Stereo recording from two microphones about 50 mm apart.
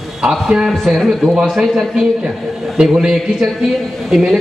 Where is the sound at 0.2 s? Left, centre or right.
Centre.